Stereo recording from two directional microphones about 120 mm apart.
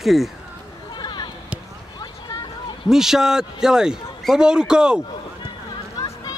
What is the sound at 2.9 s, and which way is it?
A man's voice, 5° right (ahead or behind).